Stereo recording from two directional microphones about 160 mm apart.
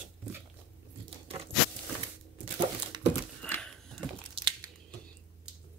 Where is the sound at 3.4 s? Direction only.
5° left (ahead or behind).